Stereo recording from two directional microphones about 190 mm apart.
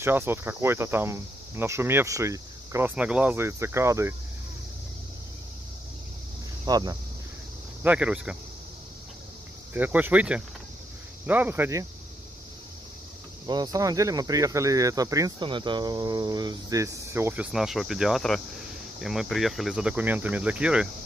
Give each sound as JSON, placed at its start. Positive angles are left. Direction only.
{"t": 0.0, "sound": "speech", "side_deg": -10}
{"t": 6.6, "sound": "speech", "side_deg": -20}
{"t": 7.8, "sound": "speech", "side_deg": -5}
{"t": 9.8, "sound": "speech", "side_deg": -10}
{"t": 13.5, "sound": "speech", "side_deg": -20}